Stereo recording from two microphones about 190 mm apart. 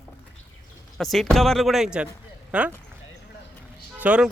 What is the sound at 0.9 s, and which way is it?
Speech, centre (ahead or behind).